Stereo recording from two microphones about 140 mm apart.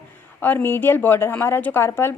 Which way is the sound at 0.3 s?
15° left (ahead or behind).